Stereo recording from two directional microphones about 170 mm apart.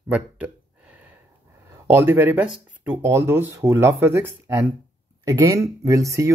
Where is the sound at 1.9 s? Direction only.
15° right (ahead or behind).